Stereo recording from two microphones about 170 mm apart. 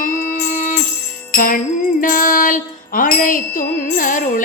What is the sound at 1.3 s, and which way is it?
Jingle bell, 55° left (ahead or behind).